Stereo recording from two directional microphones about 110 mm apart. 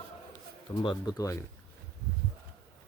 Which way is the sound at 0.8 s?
45° left (ahead or behind).